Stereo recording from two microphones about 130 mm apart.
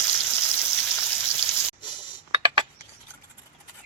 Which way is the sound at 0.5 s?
20° left (ahead or behind).